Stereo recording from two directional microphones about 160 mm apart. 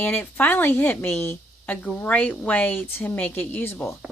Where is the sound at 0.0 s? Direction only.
10° left (ahead or behind).